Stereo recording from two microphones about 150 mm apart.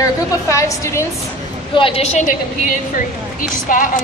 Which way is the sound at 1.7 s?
40° left (ahead or behind).